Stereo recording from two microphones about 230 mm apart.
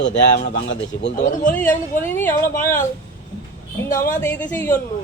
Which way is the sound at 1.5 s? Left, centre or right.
Centre.